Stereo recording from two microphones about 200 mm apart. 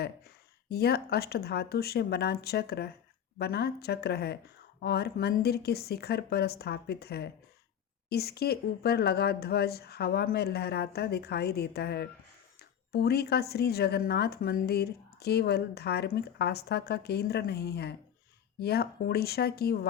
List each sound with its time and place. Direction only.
0.0 s speech: 55° left (ahead or behind)